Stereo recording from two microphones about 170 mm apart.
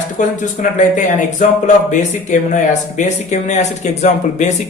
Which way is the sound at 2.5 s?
45° left (ahead or behind).